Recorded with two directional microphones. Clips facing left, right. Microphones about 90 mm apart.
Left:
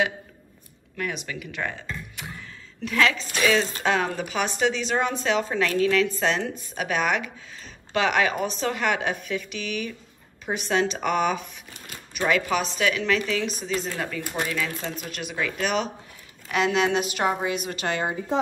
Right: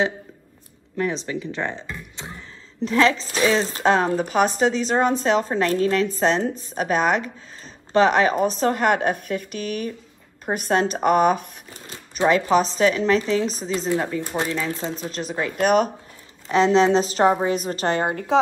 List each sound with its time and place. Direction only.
0.9 s a woman's voice: 30° right (ahead or behind)
11.9 s speech: 30° right (ahead or behind)
13.7 s speech: 25° right (ahead or behind); by 15.9 s 45° right (ahead or behind)
16.4 s speech: 30° right (ahead or behind)
18.0 s speech: 80° right